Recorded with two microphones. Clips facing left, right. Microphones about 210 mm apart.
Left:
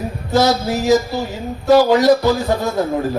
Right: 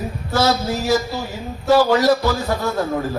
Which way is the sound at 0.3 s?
15° left (ahead or behind).